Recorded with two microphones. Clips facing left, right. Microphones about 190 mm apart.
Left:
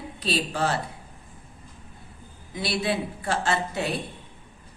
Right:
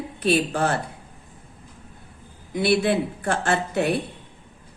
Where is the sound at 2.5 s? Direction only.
55° right (ahead or behind).